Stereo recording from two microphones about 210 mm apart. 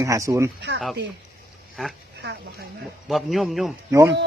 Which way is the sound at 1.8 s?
Centre (ahead or behind).